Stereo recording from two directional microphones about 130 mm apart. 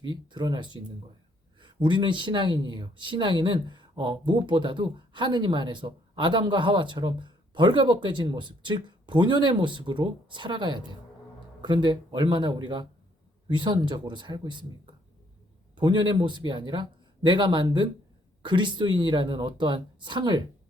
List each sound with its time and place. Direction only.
0.1 s speech: 35° right (ahead or behind)